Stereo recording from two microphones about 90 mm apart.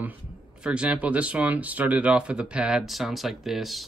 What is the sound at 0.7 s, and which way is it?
Speech, 15° right (ahead or behind).